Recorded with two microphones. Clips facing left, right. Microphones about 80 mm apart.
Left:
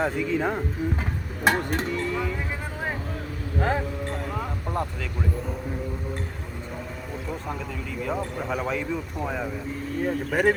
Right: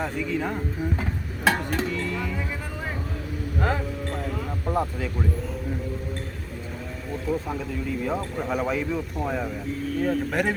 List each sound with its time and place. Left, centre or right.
0.0 s speech: centre
4.7 s speech: centre
7.3 s speech: centre